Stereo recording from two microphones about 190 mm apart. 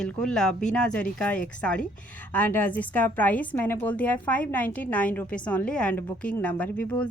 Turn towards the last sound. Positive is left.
turn(degrees=5)  # may be behind; listen again after turning